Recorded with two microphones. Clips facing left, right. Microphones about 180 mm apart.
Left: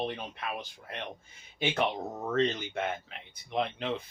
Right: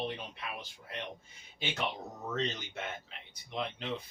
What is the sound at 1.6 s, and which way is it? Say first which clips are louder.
Speech: left 7 dB; 55° left (ahead or behind).